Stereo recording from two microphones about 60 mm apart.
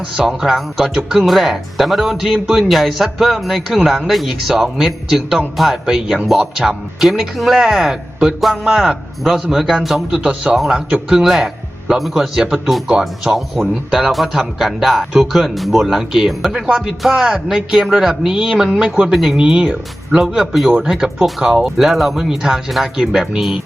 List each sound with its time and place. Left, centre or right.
0.2 s a man's voice: centre
19.4 s a man's voice: centre